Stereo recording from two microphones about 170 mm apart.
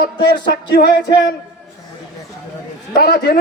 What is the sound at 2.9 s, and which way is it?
Speech, 65° left (ahead or behind).